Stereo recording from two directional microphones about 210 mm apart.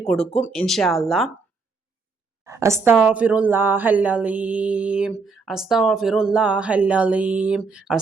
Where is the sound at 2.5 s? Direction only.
15° right (ahead or behind).